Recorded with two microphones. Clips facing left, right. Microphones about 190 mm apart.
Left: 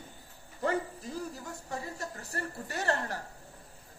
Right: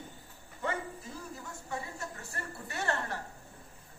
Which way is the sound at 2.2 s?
40° left (ahead or behind).